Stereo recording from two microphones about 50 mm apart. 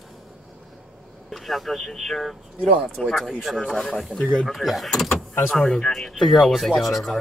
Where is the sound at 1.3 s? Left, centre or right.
Centre.